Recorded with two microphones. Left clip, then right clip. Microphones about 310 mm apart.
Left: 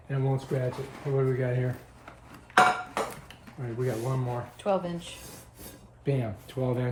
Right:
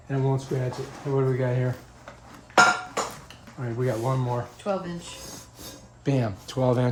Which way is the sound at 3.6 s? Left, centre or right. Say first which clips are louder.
Right 4 dB; centre.